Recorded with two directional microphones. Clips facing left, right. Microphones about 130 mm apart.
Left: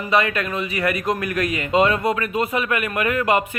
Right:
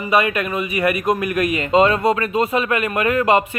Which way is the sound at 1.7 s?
35° right (ahead or behind).